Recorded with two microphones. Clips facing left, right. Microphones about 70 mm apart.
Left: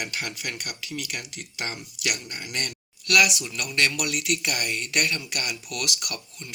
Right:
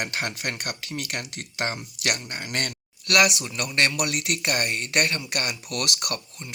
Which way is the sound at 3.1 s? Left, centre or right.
Right.